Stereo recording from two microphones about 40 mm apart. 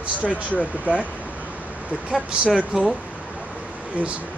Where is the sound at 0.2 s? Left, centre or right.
Left.